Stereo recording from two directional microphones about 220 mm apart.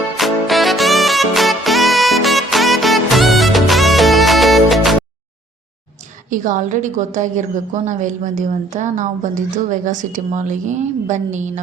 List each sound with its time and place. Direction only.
0.2 s music: centre (ahead or behind)
6.3 s a woman's voice: 35° right (ahead or behind)